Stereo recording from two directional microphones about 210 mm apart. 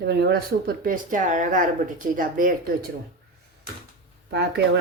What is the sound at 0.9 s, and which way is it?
A woman's voice, 40° right (ahead or behind).